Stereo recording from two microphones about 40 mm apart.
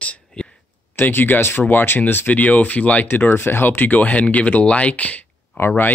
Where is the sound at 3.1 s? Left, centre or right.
Left.